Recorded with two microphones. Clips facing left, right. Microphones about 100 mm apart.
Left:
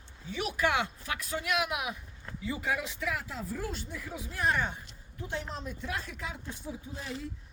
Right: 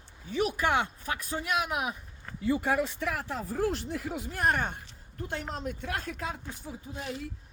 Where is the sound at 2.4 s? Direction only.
55° right (ahead or behind).